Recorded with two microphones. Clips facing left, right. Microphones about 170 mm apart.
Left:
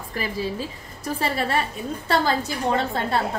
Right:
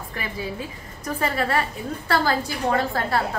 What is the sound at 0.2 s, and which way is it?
A woman's voice, 30° left (ahead or behind).